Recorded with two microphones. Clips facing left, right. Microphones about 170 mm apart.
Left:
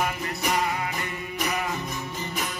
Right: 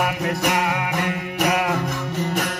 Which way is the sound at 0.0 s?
75° right (ahead or behind).